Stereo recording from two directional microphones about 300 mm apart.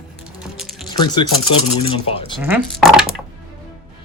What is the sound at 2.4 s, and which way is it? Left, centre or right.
Speech, centre.